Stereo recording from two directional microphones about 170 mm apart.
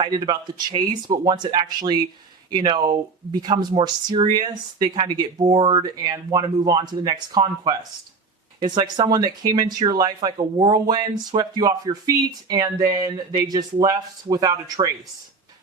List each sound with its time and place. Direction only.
0.0 s speech: 25° right (ahead or behind)